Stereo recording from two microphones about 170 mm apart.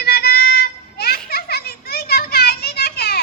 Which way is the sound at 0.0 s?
70° left (ahead or behind).